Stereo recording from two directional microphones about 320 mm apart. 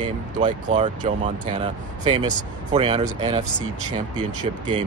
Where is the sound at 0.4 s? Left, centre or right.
Right.